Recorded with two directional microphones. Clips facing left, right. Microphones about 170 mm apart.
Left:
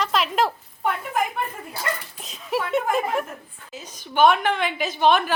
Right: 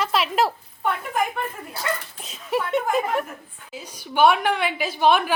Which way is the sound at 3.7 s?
10° right (ahead or behind).